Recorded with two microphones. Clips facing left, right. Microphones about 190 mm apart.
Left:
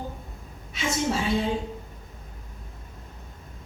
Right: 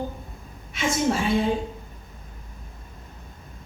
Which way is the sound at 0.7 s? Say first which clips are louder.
Right 3 dB; 55° right (ahead or behind).